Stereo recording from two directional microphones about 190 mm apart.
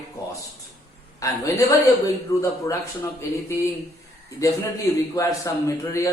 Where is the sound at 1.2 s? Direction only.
15° left (ahead or behind).